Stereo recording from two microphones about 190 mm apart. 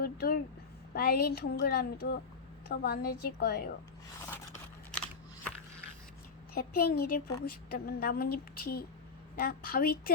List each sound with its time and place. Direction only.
0.0 s a sound: 50° left (ahead or behind)
0.9 s speech: 55° left (ahead or behind)
6.5 s a woman's voice: 50° left (ahead or behind)